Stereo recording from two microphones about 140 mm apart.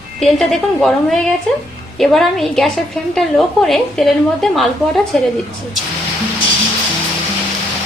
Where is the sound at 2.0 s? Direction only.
Centre (ahead or behind).